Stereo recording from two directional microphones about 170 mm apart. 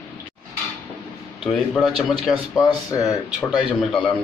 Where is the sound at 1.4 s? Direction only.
Centre (ahead or behind).